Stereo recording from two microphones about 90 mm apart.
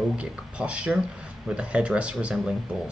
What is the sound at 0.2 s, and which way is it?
Speech, 15° right (ahead or behind).